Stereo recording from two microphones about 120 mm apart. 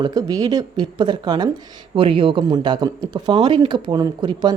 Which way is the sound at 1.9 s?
45° right (ahead or behind).